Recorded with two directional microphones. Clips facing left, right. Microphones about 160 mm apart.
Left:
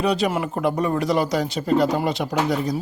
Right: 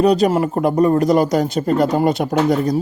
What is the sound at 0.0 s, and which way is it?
A man's voice, 40° right (ahead or behind).